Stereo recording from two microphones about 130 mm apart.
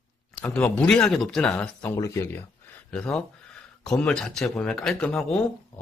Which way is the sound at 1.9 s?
25° left (ahead or behind).